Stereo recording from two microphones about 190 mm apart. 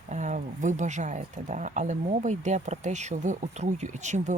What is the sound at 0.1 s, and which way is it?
Speech, 40° right (ahead or behind).